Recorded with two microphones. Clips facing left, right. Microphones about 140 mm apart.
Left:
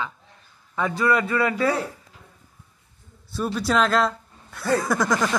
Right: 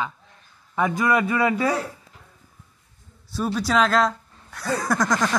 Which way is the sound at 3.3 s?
Centre (ahead or behind).